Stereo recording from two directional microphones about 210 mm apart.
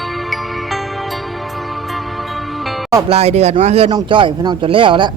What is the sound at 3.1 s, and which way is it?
Speech, 30° right (ahead or behind).